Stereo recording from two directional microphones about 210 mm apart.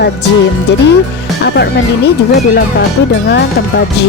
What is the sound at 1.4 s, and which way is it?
Music, 50° left (ahead or behind).